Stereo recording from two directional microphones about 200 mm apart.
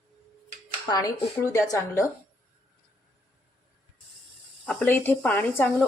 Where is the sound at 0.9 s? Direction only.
20° left (ahead or behind).